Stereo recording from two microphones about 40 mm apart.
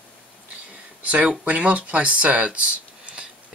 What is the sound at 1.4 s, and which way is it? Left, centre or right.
Speech, right.